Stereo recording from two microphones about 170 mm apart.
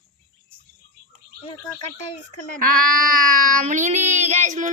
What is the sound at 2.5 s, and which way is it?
Speech, 55° right (ahead or behind).